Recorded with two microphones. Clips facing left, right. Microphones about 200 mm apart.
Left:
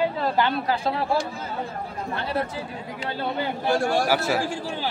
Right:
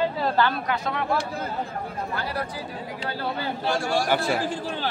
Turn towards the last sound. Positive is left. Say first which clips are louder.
# even
turn(degrees=10)  # may be behind; listen again after turning